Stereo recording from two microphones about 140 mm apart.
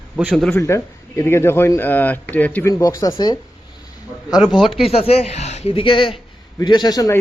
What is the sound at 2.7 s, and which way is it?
Speech, 25° left (ahead or behind).